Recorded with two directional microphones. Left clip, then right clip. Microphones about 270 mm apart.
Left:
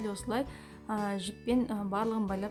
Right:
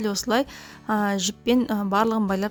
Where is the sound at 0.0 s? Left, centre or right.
Right.